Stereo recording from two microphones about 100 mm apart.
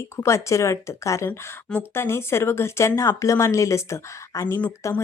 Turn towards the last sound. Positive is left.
turn(degrees=30)  # may be behind; listen again after turning